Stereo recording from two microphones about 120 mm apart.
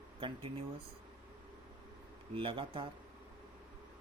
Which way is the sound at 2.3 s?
50° right (ahead or behind).